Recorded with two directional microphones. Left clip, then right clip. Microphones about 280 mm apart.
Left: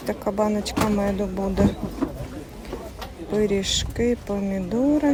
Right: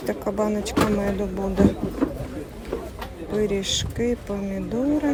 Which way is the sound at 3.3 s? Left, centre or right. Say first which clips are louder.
Left 1 dB; left.